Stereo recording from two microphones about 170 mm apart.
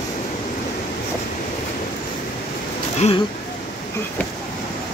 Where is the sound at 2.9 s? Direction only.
40° left (ahead or behind).